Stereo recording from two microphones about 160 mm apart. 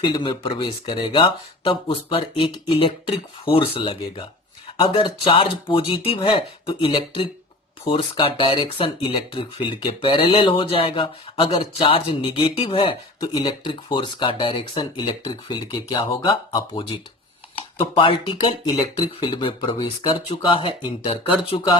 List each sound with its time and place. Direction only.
0.0 s speech: 30° left (ahead or behind)